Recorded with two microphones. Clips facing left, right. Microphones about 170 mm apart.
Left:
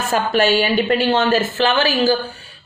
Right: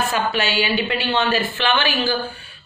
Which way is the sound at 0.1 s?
45° left (ahead or behind).